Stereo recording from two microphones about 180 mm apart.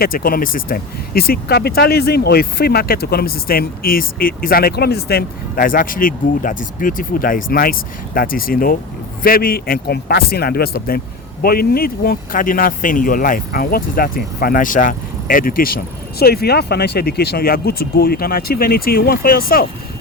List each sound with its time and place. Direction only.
0.0 s speech: 55° left (ahead or behind)